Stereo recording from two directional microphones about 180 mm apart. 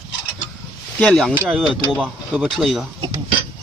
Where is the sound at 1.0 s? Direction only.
5° left (ahead or behind).